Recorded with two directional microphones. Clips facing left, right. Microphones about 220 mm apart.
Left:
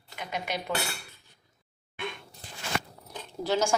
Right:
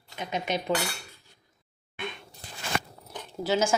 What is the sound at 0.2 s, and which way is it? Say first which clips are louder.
Speech: right 4 dB; 20° right (ahead or behind).